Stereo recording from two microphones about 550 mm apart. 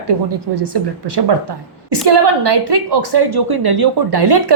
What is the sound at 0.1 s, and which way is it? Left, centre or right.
A woman's voice, right.